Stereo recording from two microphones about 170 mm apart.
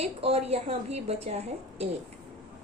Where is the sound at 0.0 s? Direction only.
35° right (ahead or behind).